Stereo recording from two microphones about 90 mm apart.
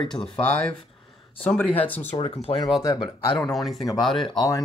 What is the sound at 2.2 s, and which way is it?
Speech, 90° left.